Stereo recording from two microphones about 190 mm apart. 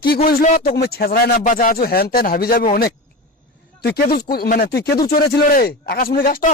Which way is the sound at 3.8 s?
55° left (ahead or behind).